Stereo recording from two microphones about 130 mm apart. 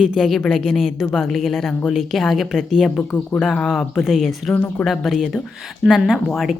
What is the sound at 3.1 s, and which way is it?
Speech, 15° left (ahead or behind).